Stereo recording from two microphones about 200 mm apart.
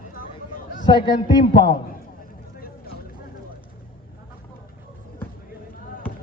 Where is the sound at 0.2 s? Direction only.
45° left (ahead or behind).